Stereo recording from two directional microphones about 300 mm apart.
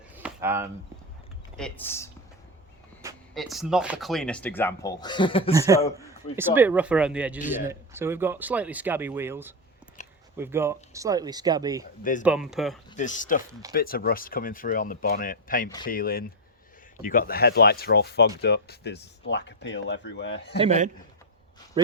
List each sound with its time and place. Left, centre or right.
0.1 s a sound: centre
1.5 s speech: centre
3.3 s speech: centre
5.5 s speech: centre
10.0 s a sound: left
10.3 s speech: centre
12.9 s speech: left
13.5 s speech: centre
13.7 s speech: left
20.6 s a man's voice: right